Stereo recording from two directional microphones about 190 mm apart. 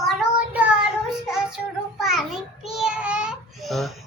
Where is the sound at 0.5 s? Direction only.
5° right (ahead or behind).